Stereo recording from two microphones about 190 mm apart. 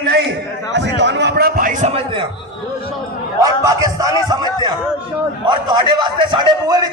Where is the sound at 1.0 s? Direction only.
65° right (ahead or behind); by 2.3 s 30° right (ahead or behind).